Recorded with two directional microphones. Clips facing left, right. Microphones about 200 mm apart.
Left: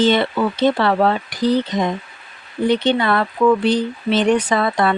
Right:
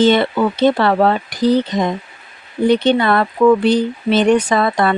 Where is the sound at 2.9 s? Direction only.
45° right (ahead or behind).